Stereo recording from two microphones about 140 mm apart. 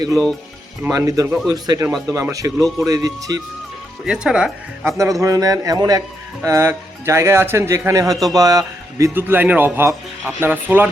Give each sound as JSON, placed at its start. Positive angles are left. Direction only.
{"t": 0.8, "sound": "a man's voice", "side_deg": -20}
{"t": 4.0, "sound": "speech", "side_deg": -5}
{"t": 5.2, "sound": "a man's voice", "side_deg": -25}